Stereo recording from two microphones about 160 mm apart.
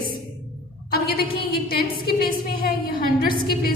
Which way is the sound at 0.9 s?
75° left (ahead or behind).